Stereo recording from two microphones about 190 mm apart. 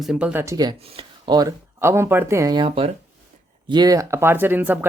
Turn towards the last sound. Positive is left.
turn(degrees=-10)  # may be behind; listen again after turning